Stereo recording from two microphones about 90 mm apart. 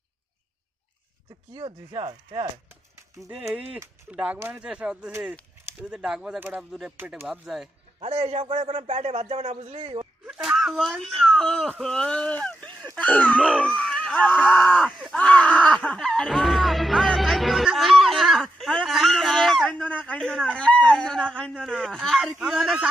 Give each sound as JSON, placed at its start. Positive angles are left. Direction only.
{"t": 1.5, "sound": "a man's voice", "side_deg": -85}
{"t": 3.5, "sound": "a man's voice", "side_deg": -10}
{"t": 7.9, "sound": "a man's voice", "side_deg": -90}
{"t": 10.2, "sound": "speech", "side_deg": -10}
{"t": 12.9, "sound": "a sound", "side_deg": 15}
{"t": 13.6, "sound": "speech", "side_deg": 10}
{"t": 15.4, "sound": "music", "side_deg": 15}
{"t": 18.6, "sound": "speech", "side_deg": 5}
{"t": 19.6, "sound": "speech", "side_deg": 15}
{"t": 22.2, "sound": "a man's voice", "side_deg": -5}